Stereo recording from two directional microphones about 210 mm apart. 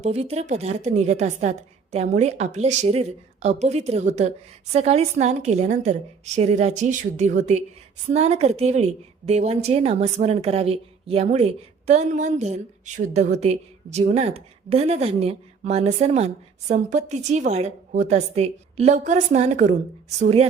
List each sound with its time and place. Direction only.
0.0 s a woman's voice: 30° right (ahead or behind)